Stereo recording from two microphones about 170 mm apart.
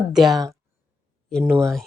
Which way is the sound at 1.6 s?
Centre (ahead or behind).